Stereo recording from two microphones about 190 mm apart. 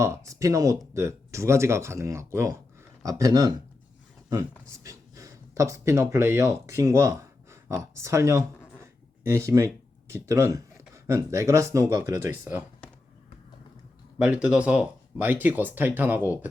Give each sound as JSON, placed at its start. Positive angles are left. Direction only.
{"t": 0.0, "sound": "speech", "side_deg": -15}
{"t": 14.2, "sound": "speech", "side_deg": -5}